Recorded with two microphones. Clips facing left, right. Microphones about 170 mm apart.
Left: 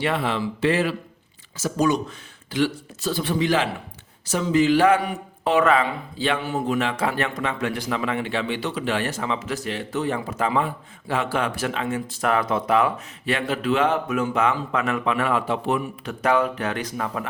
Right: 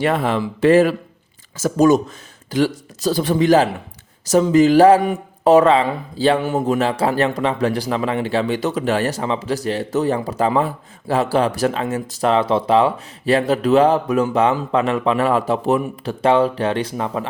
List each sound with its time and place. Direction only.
0.0 s a man's voice: 45° right (ahead or behind)
12.3 s a man's voice: 25° right (ahead or behind)
16.2 s speech: 30° right (ahead or behind)